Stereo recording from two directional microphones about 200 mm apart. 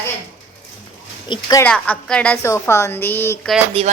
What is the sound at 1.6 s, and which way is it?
A woman's voice, 5° left (ahead or behind).